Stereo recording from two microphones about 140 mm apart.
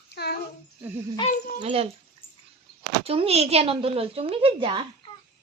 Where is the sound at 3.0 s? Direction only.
45° right (ahead or behind).